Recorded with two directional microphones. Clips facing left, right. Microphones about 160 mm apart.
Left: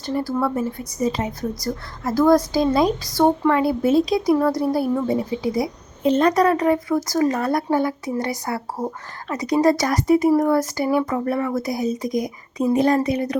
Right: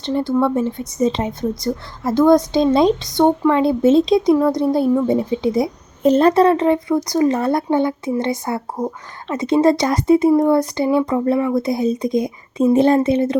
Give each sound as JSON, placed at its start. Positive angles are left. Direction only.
{"t": 0.0, "sound": "speech", "side_deg": -25}
{"t": 6.0, "sound": "speech", "side_deg": -40}